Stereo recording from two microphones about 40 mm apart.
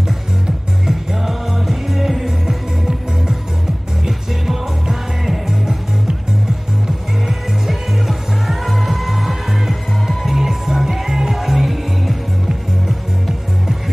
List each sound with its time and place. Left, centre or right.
0.8 s music: centre
2.4 s music: centre
5.5 s music: centre
7.2 s music: centre